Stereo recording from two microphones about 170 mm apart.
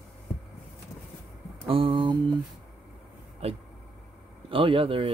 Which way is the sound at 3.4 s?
35° right (ahead or behind).